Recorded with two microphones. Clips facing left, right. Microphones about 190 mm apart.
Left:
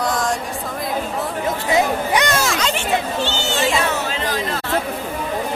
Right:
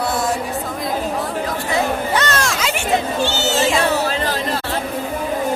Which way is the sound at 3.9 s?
35° right (ahead or behind).